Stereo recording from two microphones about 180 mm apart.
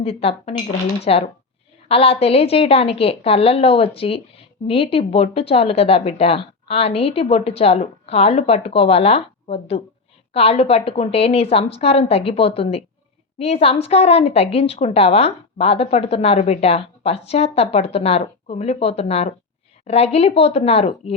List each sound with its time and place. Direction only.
0.0 s a woman's voice: 35° left (ahead or behind)